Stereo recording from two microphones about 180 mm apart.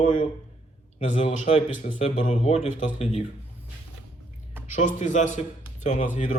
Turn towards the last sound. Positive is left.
turn(degrees=40)  # may be behind; listen again after turning